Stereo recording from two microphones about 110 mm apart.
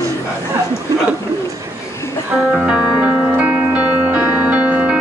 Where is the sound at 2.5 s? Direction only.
5° right (ahead or behind).